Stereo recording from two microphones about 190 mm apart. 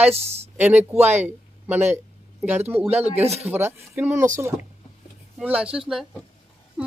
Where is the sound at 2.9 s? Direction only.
35° right (ahead or behind).